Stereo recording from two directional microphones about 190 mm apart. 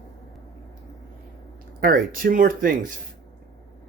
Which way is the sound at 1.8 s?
50° right (ahead or behind).